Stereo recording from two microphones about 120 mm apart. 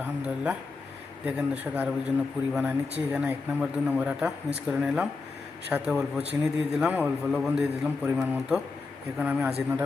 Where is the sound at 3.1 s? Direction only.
15° right (ahead or behind).